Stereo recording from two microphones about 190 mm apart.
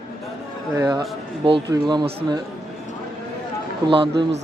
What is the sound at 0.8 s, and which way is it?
Speech, 20° right (ahead or behind).